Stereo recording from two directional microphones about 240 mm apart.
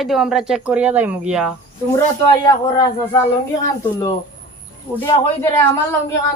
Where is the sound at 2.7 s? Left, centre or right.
Centre.